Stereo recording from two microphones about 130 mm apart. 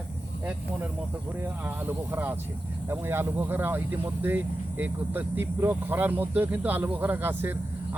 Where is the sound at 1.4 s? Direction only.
15° right (ahead or behind).